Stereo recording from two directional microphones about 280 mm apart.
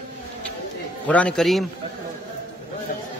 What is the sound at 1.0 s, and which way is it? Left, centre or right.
Speech, centre.